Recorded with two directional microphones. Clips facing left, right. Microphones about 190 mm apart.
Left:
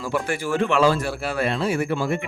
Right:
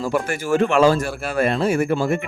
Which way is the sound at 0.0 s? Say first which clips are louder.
Right 3 dB; 45° right (ahead or behind).